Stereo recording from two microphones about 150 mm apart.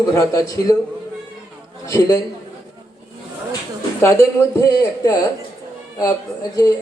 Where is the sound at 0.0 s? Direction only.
20° left (ahead or behind).